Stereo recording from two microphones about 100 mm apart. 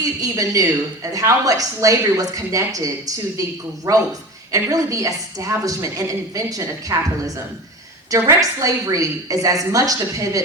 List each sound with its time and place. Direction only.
0.0 s a woman's voice: 35° right (ahead or behind)